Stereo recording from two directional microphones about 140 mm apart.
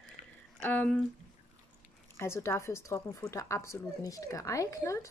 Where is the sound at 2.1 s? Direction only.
20° left (ahead or behind).